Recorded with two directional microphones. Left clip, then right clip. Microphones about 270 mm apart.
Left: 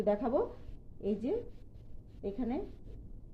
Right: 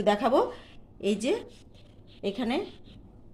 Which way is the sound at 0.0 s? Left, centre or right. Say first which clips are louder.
Right 7 dB; right.